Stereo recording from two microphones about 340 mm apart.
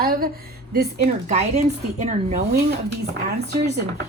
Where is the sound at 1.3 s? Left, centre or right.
Centre.